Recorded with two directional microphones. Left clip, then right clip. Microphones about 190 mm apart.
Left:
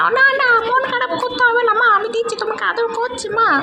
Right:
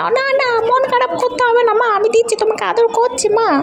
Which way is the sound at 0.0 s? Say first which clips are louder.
Left 1 dB; 35° right (ahead or behind).